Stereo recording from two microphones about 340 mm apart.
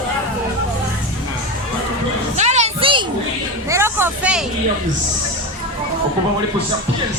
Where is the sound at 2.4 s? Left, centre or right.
Centre.